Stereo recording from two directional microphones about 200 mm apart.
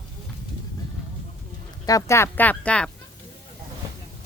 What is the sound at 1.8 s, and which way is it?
A woman's voice, 15° left (ahead or behind).